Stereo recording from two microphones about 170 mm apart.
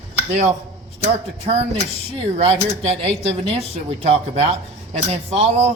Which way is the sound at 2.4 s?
35° right (ahead or behind).